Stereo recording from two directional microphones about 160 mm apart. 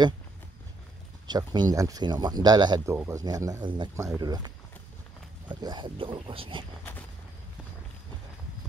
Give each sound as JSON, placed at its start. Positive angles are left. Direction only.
{"t": 1.2, "sound": "speech", "side_deg": -25}
{"t": 2.9, "sound": "speech", "side_deg": -15}
{"t": 5.5, "sound": "speech", "side_deg": -30}
{"t": 6.8, "sound": "a sound", "side_deg": 10}